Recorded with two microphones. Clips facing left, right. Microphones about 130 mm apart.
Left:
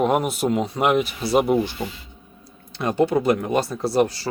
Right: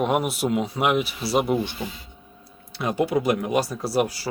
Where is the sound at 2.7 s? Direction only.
5° right (ahead or behind).